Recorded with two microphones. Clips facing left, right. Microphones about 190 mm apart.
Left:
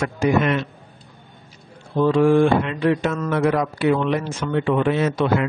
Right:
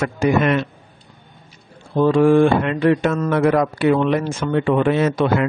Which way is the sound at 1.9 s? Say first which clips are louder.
Right 2 dB; 50° right (ahead or behind).